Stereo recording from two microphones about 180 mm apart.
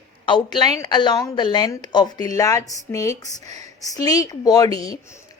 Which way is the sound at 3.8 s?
20° left (ahead or behind).